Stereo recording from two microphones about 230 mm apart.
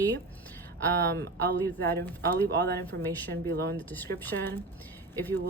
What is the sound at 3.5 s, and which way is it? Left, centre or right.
Speech, right.